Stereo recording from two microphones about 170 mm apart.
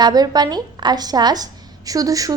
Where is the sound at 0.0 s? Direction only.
25° right (ahead or behind).